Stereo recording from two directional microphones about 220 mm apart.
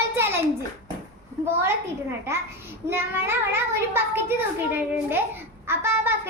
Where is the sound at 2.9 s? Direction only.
10° right (ahead or behind).